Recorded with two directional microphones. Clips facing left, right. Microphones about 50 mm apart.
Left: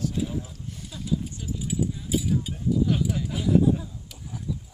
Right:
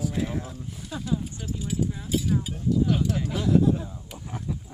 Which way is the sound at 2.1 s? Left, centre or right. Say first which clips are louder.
Even; centre.